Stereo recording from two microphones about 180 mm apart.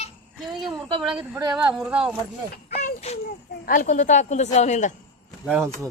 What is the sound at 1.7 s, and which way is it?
Speech, 5° right (ahead or behind).